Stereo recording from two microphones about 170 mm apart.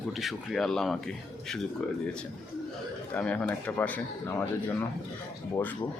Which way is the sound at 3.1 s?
5° left (ahead or behind).